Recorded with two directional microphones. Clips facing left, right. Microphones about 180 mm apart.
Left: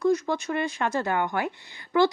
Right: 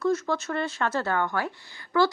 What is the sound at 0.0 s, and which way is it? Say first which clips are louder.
Speech: left 2 dB; 15° left (ahead or behind).